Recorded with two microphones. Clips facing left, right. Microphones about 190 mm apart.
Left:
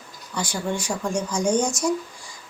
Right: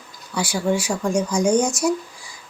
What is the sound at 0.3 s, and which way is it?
Speech, 10° right (ahead or behind).